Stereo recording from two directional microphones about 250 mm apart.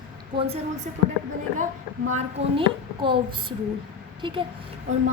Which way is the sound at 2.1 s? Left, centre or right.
Right.